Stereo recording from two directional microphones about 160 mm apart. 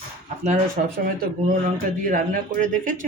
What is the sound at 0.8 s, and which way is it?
Speech, 55° right (ahead or behind).